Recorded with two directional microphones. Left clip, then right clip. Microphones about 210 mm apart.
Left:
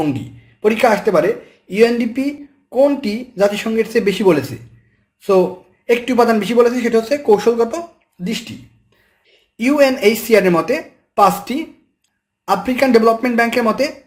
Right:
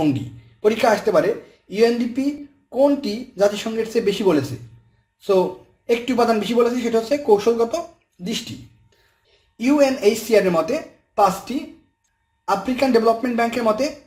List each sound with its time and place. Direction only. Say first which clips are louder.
0.6 s speech: left 4 dB; 15° left (ahead or behind)
5.9 s speech: left 5 dB; 20° left (ahead or behind)
9.6 s speech: left 4 dB; 25° left (ahead or behind)